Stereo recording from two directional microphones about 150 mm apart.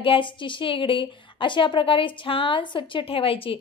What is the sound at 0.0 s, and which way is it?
A woman's voice, 35° left (ahead or behind).